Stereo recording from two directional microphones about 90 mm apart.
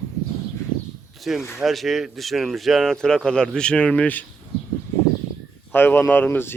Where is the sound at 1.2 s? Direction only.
Centre (ahead or behind); by 4.2 s 15° left (ahead or behind).